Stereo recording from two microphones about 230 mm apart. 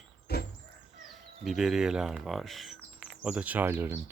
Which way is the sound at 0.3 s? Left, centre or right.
Left.